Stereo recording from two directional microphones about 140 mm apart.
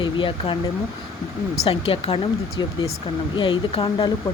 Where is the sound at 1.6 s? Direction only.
45° left (ahead or behind).